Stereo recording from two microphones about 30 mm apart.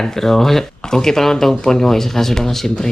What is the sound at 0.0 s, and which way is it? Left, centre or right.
Speech, centre.